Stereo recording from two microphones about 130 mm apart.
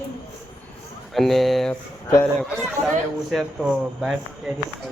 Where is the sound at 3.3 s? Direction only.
5° right (ahead or behind).